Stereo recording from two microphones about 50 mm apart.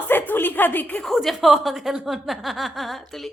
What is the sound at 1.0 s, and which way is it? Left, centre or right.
Speech, centre.